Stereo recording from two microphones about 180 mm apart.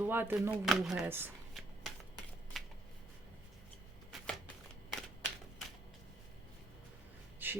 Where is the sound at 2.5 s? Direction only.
Centre (ahead or behind).